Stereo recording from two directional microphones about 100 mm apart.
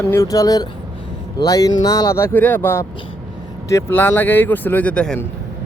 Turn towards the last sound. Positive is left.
turn(degrees=10)  # may be behind; listen again after turning